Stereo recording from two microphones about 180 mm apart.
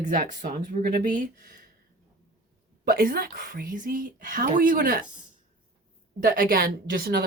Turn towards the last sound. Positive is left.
turn(degrees=-60)  # may be behind; listen again after turning